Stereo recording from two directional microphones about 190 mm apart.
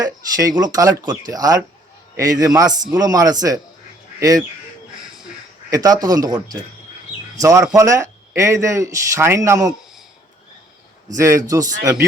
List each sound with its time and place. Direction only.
0.0 s a man's voice: 20° right (ahead or behind)
5.7 s speech: 20° right (ahead or behind)
7.7 s a man's voice: 15° right (ahead or behind)
11.1 s a man's voice: 15° right (ahead or behind)